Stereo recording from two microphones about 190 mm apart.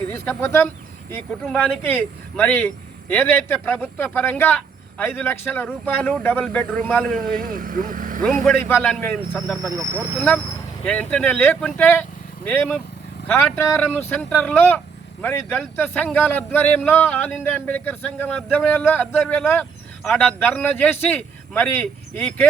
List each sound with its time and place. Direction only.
0.1 s speech: 10° left (ahead or behind)
7.2 s speech: 50° right (ahead or behind)
8.4 s speech: 10° left (ahead or behind)
9.6 s speech: 15° right (ahead or behind)
10.2 s speech: 5° left (ahead or behind)
13.2 s speech: 10° left (ahead or behind)